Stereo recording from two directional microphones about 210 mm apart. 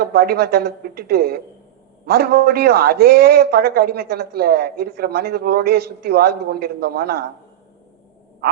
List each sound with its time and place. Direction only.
0.0 s a man's voice: 50° right (ahead or behind)